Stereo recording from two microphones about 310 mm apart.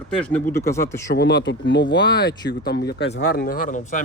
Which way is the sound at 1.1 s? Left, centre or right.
Left.